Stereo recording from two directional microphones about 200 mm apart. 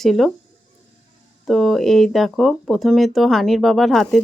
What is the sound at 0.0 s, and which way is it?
Speech, centre (ahead or behind).